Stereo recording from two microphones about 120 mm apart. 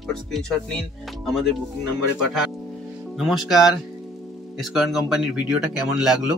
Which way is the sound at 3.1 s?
Centre (ahead or behind).